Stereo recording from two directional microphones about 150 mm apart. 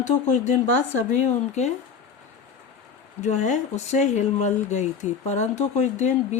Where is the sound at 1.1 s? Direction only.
50° left (ahead or behind).